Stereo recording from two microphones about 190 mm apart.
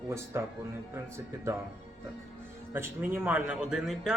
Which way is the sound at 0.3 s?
15° right (ahead or behind).